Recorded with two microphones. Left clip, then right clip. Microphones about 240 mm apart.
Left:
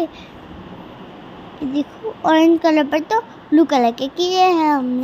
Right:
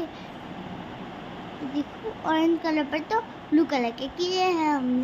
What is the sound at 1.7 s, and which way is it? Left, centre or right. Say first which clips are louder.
A woman's voice: left 8 dB; left.